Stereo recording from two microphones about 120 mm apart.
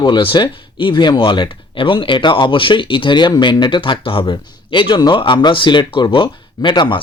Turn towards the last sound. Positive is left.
turn(degrees=40)  # may be behind; listen again after turning